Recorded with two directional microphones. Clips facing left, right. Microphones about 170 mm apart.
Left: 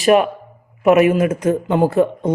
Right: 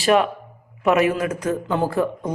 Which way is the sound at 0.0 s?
20° left (ahead or behind).